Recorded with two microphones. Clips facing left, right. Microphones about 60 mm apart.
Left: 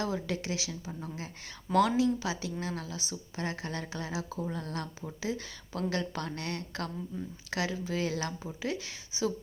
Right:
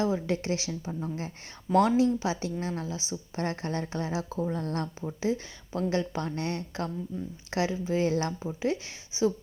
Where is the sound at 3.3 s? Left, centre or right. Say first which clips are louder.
Right 5 dB; right.